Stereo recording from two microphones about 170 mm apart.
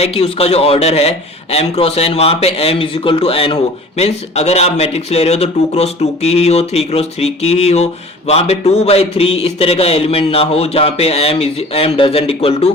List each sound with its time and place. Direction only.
0.0 s a man's voice: 35° left (ahead or behind)